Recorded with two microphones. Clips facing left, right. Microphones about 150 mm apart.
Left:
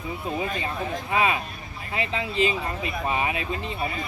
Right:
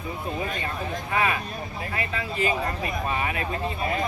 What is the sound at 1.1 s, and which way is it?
Speech, 20° left (ahead or behind).